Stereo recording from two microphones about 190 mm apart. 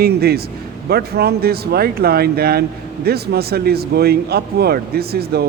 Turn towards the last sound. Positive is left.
turn(degrees=-55)  # may be behind; listen again after turning